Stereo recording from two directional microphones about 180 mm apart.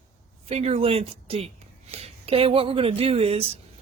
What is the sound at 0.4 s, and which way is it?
Speech, 35° right (ahead or behind).